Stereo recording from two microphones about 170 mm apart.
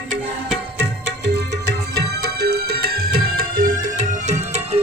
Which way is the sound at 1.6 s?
75° right (ahead or behind).